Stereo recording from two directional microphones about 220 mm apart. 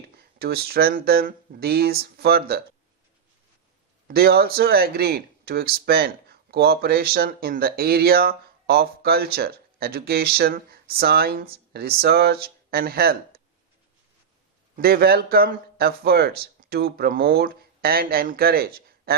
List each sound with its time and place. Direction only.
0.2 s speech: 45° right (ahead or behind)
4.1 s speech: 45° right (ahead or behind)
14.8 s speech: 45° right (ahead or behind)